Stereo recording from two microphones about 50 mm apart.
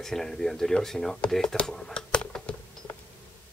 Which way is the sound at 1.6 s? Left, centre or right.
Centre.